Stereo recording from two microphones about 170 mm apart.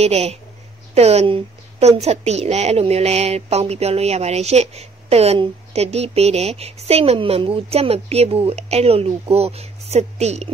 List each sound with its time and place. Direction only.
0.0 s a woman's voice: 40° right (ahead or behind)